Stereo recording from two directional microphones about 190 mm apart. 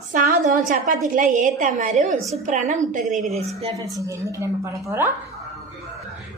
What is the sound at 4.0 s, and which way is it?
Speech, 15° right (ahead or behind).